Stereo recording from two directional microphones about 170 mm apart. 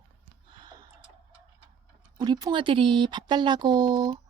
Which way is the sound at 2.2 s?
25° right (ahead or behind).